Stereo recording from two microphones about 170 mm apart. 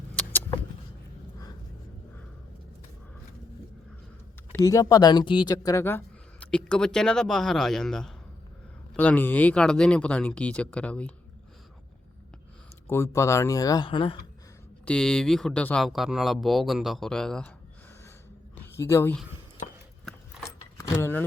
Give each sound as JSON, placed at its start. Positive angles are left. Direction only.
{"t": 4.6, "sound": "speech", "side_deg": 20}
{"t": 12.9, "sound": "speech", "side_deg": 15}
{"t": 14.8, "sound": "speech", "side_deg": 5}
{"t": 18.5, "sound": "a sound", "side_deg": 15}
{"t": 20.7, "sound": "speech", "side_deg": 20}